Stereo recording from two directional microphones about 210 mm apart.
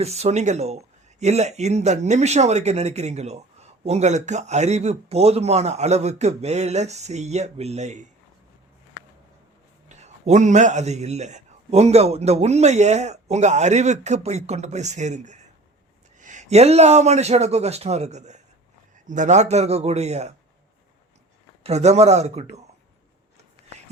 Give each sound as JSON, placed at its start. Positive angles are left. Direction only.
{"t": 0.0, "sound": "a man's voice", "side_deg": -30}
{"t": 9.9, "sound": "a man's voice", "side_deg": -35}
{"t": 21.6, "sound": "a man's voice", "side_deg": -30}